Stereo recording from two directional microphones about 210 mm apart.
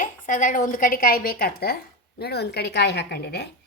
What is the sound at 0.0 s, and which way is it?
A woman's voice, 40° left (ahead or behind).